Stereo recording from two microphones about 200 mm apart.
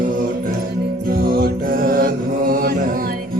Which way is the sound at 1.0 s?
50° right (ahead or behind).